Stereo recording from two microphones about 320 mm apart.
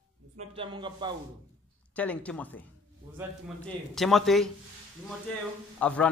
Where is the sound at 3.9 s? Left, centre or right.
Centre.